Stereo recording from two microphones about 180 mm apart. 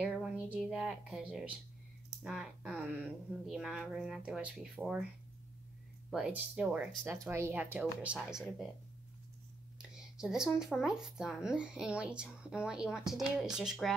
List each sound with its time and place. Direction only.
0.0 s a sound: 5° right (ahead or behind)
2.2 s speech: 5° right (ahead or behind)
6.0 s speech: 5° right (ahead or behind)
9.8 s speech: 5° right (ahead or behind)